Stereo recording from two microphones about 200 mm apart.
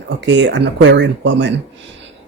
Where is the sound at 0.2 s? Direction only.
60° right (ahead or behind).